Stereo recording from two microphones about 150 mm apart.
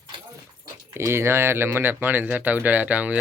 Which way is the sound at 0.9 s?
20° right (ahead or behind).